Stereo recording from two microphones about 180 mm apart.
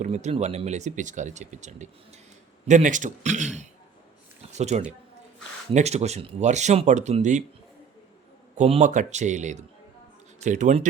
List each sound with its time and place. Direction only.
0.0 s a man's voice: 40° right (ahead or behind)
4.5 s speech: 40° right (ahead or behind)
8.5 s speech: 40° right (ahead or behind)